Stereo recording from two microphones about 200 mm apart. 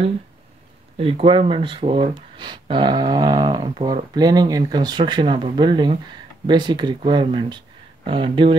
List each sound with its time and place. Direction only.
0.9 s speech: 30° right (ahead or behind)